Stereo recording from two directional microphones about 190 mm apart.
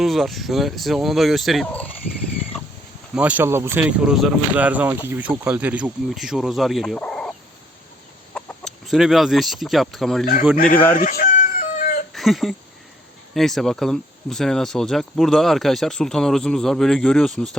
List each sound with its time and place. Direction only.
0.0 s speech: centre (ahead or behind)
3.2 s speech: 10° right (ahead or behind)
10.9 s chicken: 45° left (ahead or behind)
12.1 s speech: centre (ahead or behind)